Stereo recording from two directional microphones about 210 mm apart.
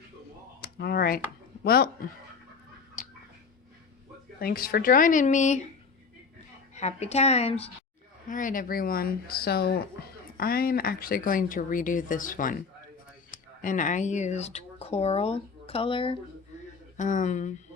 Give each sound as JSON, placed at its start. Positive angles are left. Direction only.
{"t": 0.6, "sound": "speech", "side_deg": 45}
{"t": 3.0, "sound": "a sound", "side_deg": 40}
{"t": 4.4, "sound": "speech", "side_deg": 45}
{"t": 6.7, "sound": "speech", "side_deg": 30}
{"t": 17.0, "sound": "speech", "side_deg": 35}